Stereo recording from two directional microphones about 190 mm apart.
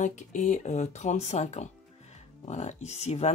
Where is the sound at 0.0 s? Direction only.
40° left (ahead or behind).